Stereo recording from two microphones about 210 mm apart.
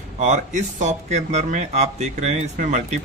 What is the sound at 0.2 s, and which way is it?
Speech, 35° right (ahead or behind).